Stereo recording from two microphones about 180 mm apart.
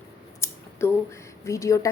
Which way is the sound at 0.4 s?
15° left (ahead or behind).